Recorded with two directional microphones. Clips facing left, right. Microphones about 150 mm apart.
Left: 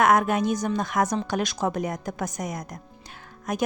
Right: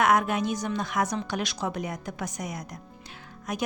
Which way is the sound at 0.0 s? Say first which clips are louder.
Left 3 dB; 45° left (ahead or behind).